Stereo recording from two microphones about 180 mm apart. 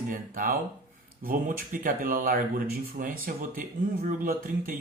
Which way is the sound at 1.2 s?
50° right (ahead or behind).